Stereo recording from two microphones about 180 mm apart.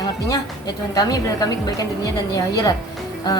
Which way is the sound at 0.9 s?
20° left (ahead or behind).